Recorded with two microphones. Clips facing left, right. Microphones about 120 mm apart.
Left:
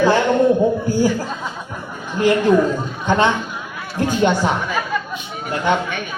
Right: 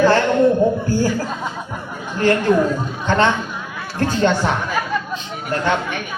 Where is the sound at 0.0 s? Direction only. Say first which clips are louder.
Right 1 dB; 15° left (ahead or behind).